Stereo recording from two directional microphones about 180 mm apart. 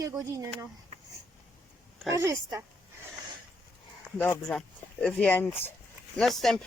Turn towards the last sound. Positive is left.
turn(degrees=0)  # may be behind; listen again after turning